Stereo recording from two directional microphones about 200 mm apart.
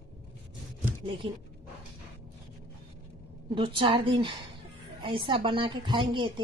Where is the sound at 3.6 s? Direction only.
25° right (ahead or behind).